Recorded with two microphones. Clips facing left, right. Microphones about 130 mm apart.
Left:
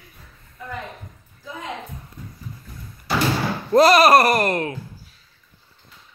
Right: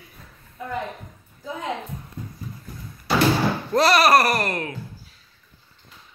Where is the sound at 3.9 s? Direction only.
20° left (ahead or behind).